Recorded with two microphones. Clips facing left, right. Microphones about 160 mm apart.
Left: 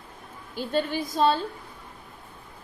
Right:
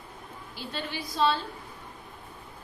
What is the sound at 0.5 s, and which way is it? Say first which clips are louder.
Speech: left 10 dB; 50° left (ahead or behind).